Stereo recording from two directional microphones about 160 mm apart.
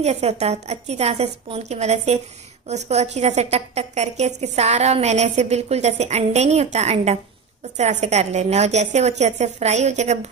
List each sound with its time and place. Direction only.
0.0 s a woman's voice: 40° right (ahead or behind)